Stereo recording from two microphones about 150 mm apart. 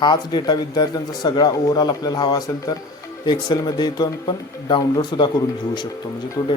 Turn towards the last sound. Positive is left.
turn(degrees=30)  # may be behind; listen again after turning